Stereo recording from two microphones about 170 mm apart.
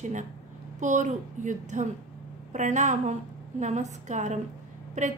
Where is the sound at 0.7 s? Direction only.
45° right (ahead or behind).